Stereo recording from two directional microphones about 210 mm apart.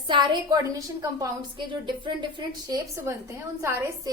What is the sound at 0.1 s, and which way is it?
A woman's voice, 20° right (ahead or behind).